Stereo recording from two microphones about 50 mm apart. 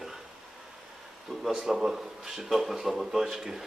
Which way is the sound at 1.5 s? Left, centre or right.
Centre.